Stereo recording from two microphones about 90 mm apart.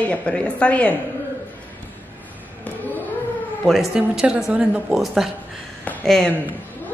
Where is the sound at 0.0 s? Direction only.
15° left (ahead or behind).